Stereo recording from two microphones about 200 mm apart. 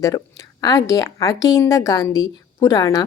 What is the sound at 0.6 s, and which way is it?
A woman's voice, 15° left (ahead or behind).